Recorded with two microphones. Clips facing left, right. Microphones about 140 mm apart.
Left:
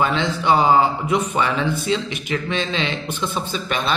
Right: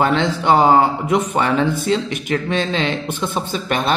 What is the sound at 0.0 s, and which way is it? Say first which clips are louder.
Speech: right 3 dB; 55° right (ahead or behind).